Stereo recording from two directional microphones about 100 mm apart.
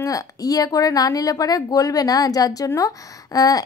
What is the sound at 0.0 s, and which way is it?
Speech, 35° left (ahead or behind).